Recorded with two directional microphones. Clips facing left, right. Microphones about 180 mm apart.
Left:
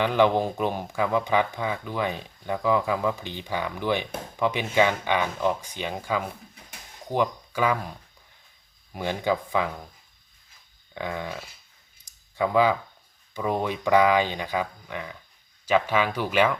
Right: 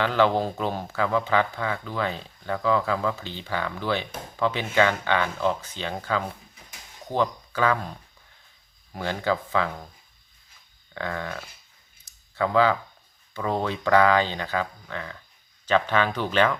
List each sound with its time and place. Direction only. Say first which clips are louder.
0.0 s speech: left 1 dB; 15° left (ahead or behind)
9.0 s speech: even; 15° left (ahead or behind)
10.9 s speech: even; 15° left (ahead or behind)
12.1 s a sound: right 1 dB; 10° left (ahead or behind)
12.4 s speech: even; 15° left (ahead or behind)